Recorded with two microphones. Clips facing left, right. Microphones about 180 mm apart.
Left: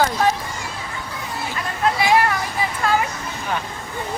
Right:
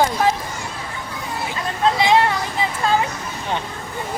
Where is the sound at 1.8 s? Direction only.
20° right (ahead or behind).